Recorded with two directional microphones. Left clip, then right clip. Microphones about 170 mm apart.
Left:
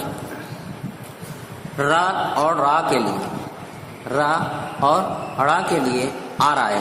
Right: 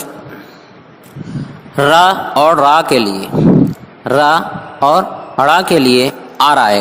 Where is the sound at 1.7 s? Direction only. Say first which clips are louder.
Right 10 dB; 45° right (ahead or behind).